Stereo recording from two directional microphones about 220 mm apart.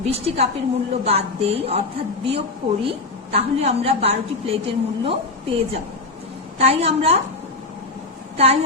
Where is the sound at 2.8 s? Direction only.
25° right (ahead or behind).